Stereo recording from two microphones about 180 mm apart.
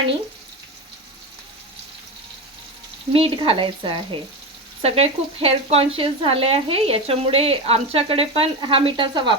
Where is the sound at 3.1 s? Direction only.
30° right (ahead or behind).